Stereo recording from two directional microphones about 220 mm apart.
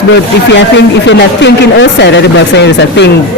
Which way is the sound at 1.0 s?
50° left (ahead or behind).